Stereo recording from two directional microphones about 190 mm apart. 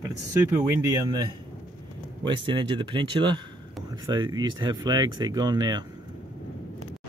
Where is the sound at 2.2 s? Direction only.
25° right (ahead or behind).